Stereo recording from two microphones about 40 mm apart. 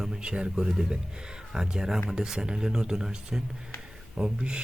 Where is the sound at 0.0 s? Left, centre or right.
Centre.